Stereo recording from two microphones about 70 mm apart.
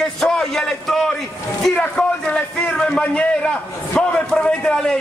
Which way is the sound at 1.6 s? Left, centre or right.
Centre.